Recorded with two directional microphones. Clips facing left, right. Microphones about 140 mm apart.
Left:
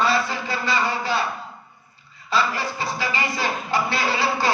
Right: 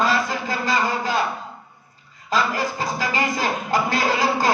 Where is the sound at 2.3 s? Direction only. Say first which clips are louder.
Right 1 dB; 45° right (ahead or behind).